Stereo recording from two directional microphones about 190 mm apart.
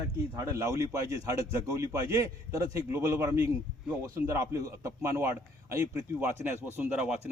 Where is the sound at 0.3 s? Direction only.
15° right (ahead or behind).